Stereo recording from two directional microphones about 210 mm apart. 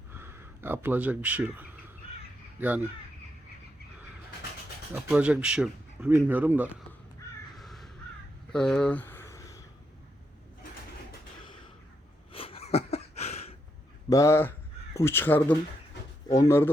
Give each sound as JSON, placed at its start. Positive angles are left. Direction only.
{"t": 0.1, "sound": "speech", "side_deg": -10}
{"t": 5.0, "sound": "speech", "side_deg": -5}
{"t": 7.5, "sound": "crow", "side_deg": 0}
{"t": 8.5, "sound": "a sound", "side_deg": 5}
{"t": 12.3, "sound": "a sound", "side_deg": 25}
{"t": 14.1, "sound": "speech", "side_deg": 15}